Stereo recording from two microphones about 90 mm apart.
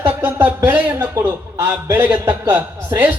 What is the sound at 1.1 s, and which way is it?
A man's voice, 30° right (ahead or behind).